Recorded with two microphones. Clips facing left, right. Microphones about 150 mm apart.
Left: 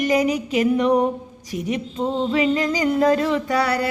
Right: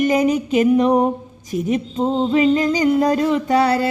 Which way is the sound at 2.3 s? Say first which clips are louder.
Right 5 dB; 25° right (ahead or behind).